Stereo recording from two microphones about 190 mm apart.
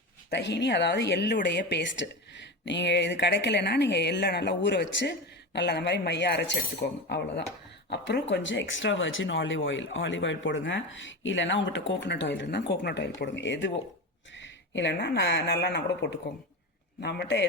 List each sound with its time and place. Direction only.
0.3 s a woman's voice: 65° left (ahead or behind)